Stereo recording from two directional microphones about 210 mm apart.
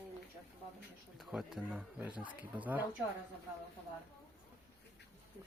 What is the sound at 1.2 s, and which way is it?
Speech, 5° right (ahead or behind).